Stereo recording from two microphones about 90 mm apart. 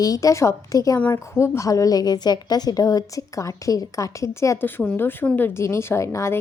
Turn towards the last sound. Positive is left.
turn(degrees=35)  # may be behind; listen again after turning